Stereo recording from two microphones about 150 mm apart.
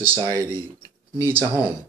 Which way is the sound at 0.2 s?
20° right (ahead or behind).